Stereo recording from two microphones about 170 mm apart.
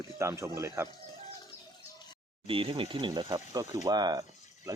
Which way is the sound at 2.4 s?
30° right (ahead or behind).